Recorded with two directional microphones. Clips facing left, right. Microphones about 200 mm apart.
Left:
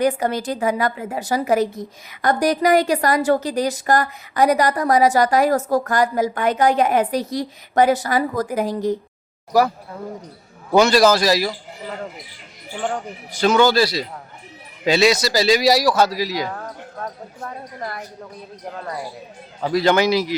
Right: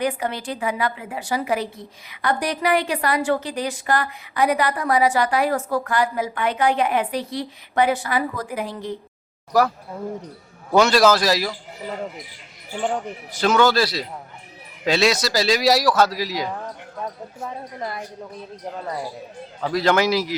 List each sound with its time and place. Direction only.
0.0 s a woman's voice: 40° left (ahead or behind)
9.5 s speech: centre (ahead or behind)
10.8 s speech: centre (ahead or behind)
12.8 s speech: centre (ahead or behind)
19.6 s speech: centre (ahead or behind)